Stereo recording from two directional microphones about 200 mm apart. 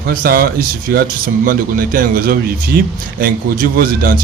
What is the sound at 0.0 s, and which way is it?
Speech, 50° right (ahead or behind).